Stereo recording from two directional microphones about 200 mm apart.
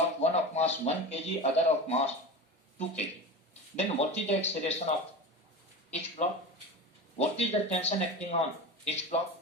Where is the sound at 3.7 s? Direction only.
30° left (ahead or behind).